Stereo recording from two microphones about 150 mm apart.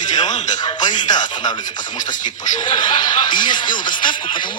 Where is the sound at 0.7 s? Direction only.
30° left (ahead or behind).